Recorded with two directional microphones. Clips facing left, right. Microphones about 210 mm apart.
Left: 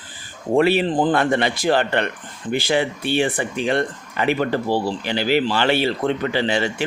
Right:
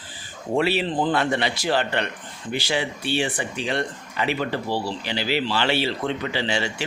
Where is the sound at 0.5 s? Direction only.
50° left (ahead or behind).